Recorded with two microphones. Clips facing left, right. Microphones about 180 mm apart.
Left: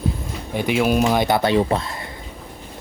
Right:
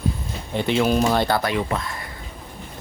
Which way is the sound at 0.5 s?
10° left (ahead or behind).